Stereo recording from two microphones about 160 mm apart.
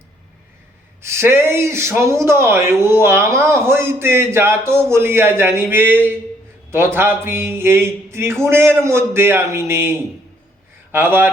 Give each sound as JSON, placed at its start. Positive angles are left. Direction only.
{"t": 1.0, "sound": "speech", "side_deg": -15}